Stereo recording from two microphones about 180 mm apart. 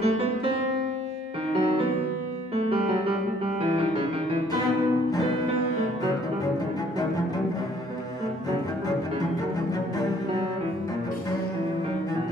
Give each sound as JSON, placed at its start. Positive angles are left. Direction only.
{"t": 0.0, "sound": "music", "side_deg": -35}
{"t": 2.5, "sound": "music", "side_deg": -35}